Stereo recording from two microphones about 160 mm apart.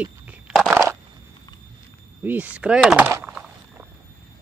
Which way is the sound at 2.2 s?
10° right (ahead or behind).